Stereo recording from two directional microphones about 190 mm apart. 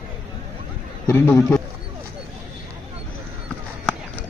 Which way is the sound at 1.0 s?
15° left (ahead or behind).